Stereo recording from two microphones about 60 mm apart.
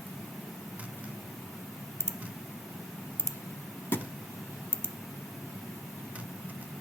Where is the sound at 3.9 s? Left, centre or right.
Left.